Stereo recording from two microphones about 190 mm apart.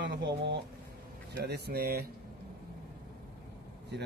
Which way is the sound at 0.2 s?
70° right (ahead or behind).